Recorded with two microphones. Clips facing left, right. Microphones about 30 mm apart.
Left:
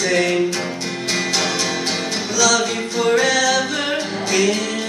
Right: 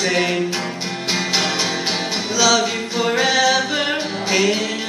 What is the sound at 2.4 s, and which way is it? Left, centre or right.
A capella, right.